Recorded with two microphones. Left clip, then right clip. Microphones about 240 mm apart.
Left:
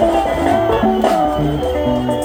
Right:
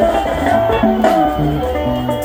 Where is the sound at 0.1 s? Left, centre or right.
Left.